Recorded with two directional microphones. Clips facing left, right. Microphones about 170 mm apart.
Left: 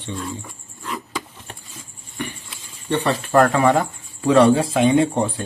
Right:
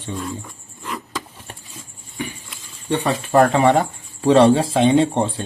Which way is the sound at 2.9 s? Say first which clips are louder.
Even; 15° right (ahead or behind).